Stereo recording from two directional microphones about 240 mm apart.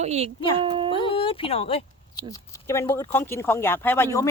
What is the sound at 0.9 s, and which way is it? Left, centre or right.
Speech, left.